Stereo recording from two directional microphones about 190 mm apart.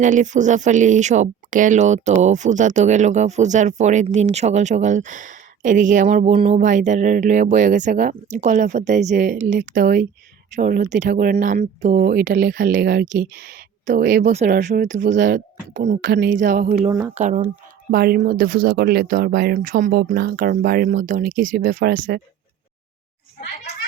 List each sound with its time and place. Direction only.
0.0 s speech: 40° right (ahead or behind)
13.5 s a sound: 40° right (ahead or behind)
14.0 s a woman's voice: 60° right (ahead or behind)
14.3 s speech: 40° right (ahead or behind)
15.9 s a woman's voice: 65° right (ahead or behind)
16.3 s speech: 45° right (ahead or behind)
16.9 s speech: 20° right (ahead or behind)
17.2 s speech: 35° right (ahead or behind)
17.9 s speech: 55° right (ahead or behind)
19.5 s speech: 45° right (ahead or behind)